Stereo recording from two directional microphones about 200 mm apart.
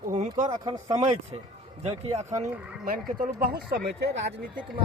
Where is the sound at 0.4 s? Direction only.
20° right (ahead or behind).